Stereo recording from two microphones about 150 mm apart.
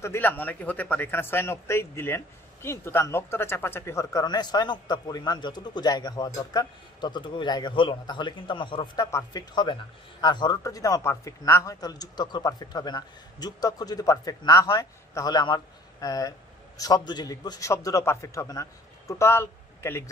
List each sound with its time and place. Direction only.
0.0 s speech: 15° left (ahead or behind)